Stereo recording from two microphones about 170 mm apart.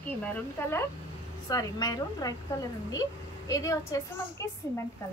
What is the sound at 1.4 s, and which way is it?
A woman's voice, 20° left (ahead or behind).